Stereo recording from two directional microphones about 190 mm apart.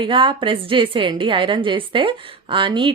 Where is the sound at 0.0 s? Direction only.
25° right (ahead or behind).